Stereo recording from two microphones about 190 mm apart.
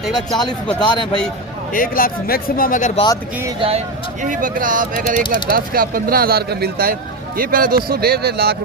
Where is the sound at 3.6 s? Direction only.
30° right (ahead or behind).